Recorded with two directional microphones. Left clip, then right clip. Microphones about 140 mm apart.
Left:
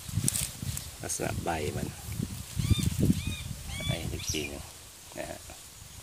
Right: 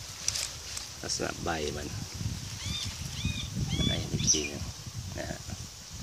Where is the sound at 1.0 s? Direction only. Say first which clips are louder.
Even; 10° left (ahead or behind).